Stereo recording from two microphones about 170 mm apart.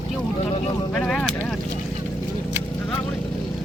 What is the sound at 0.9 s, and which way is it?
Speech, 5° left (ahead or behind).